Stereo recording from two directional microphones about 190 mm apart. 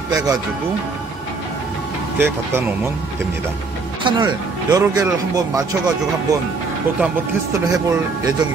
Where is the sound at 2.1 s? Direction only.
10° right (ahead or behind).